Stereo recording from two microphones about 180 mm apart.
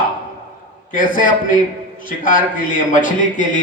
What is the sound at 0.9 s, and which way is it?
A man's voice, 50° left (ahead or behind).